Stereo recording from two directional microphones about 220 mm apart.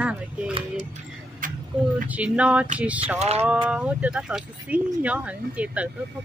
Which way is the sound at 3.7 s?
5° right (ahead or behind).